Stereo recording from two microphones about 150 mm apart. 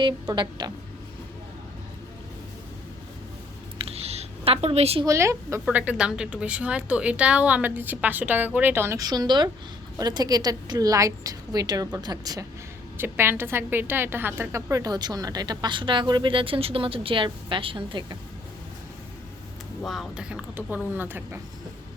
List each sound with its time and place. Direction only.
0.0 s a woman's voice: 30° right (ahead or behind)
3.8 s a sound: 40° right (ahead or behind)
5.0 s a woman's voice: 20° right (ahead or behind)
19.8 s a woman's voice: centre (ahead or behind)